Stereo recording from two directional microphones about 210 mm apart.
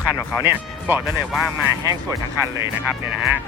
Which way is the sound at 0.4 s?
10° right (ahead or behind).